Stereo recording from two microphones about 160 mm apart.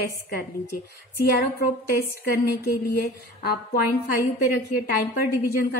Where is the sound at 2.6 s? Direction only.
80° left.